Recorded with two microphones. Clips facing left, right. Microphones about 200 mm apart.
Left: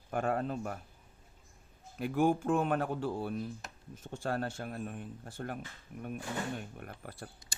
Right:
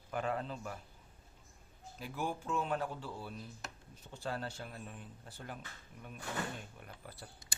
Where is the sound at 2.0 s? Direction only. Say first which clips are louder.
Left 11 dB; 55° left (ahead or behind).